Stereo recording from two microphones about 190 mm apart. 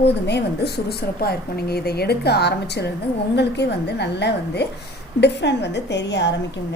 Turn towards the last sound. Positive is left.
turn(degrees=65)  # may be behind; listen again after turning